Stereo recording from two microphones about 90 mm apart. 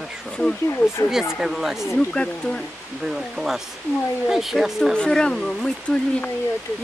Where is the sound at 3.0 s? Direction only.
Centre (ahead or behind).